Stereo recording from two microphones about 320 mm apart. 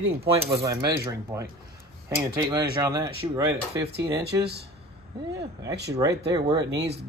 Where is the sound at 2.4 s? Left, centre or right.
Centre.